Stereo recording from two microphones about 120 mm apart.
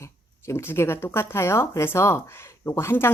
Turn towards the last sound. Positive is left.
turn(degrees=20)  # may be behind; listen again after turning